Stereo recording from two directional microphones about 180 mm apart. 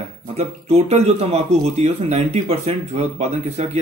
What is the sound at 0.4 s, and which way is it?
Speech, 35° right (ahead or behind).